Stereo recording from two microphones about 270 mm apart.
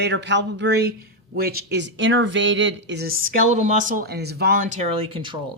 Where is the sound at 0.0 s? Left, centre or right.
Right.